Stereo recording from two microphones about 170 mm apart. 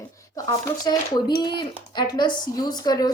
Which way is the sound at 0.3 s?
20° left (ahead or behind).